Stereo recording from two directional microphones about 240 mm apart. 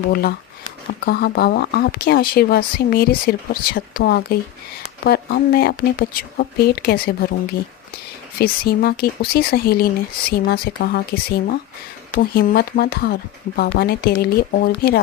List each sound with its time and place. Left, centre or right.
0.1 s speech: left
8.4 s speech: left